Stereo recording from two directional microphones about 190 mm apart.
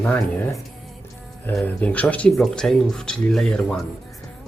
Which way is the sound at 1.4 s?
10° left (ahead or behind).